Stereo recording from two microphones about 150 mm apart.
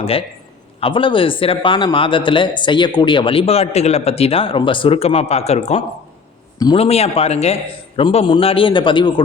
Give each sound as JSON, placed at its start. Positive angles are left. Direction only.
{"t": 0.0, "sound": "a man's voice", "side_deg": 40}